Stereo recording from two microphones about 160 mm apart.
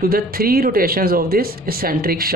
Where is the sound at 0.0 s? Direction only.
65° right (ahead or behind).